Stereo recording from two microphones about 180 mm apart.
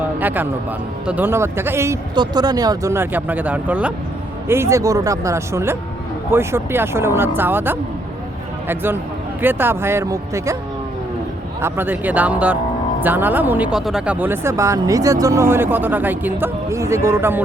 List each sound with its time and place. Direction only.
0.2 s speech: 10° right (ahead or behind)
11.6 s speech: 10° right (ahead or behind)